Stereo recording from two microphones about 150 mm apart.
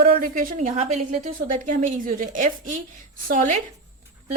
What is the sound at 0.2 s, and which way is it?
A woman's voice, 60° right (ahead or behind).